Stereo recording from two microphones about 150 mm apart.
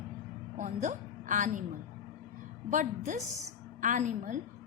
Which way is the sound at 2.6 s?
55° right (ahead or behind).